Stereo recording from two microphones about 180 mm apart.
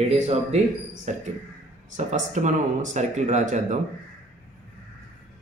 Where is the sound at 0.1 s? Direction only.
35° right (ahead or behind).